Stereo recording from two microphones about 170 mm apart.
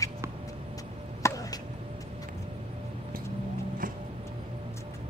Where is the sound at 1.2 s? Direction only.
20° left (ahead or behind).